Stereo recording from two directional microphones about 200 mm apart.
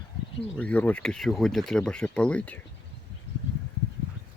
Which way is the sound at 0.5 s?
5° left (ahead or behind).